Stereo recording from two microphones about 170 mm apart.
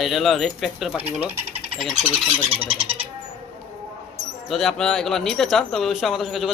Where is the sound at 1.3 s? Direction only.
40° right (ahead or behind).